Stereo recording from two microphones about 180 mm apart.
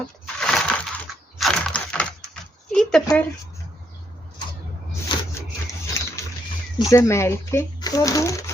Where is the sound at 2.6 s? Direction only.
Centre (ahead or behind).